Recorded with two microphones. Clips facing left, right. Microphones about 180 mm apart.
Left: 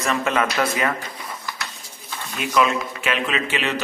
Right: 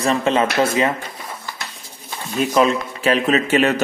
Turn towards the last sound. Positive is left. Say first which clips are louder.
# right 8 dB
turn(degrees=-45)  # may be behind; listen again after turning